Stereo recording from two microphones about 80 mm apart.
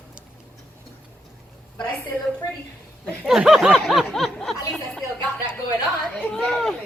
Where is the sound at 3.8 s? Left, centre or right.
Centre.